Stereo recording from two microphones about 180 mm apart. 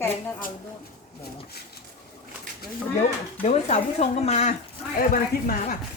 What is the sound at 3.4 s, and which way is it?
Speech, 35° left (ahead or behind).